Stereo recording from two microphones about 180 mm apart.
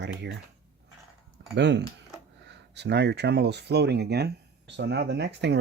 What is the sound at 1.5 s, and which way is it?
Speech, 75° right (ahead or behind).